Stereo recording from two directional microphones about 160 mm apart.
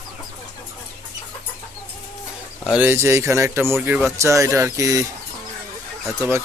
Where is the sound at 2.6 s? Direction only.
10° right (ahead or behind).